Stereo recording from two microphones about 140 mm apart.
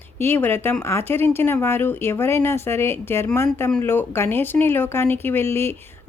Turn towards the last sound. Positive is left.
turn(degrees=15)  # may be behind; listen again after turning